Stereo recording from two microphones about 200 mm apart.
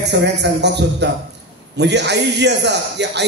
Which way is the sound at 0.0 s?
60° right (ahead or behind).